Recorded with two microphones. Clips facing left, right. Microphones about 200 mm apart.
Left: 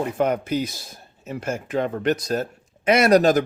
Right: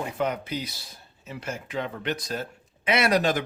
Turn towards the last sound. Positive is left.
turn(degrees=40)  # may be behind; listen again after turning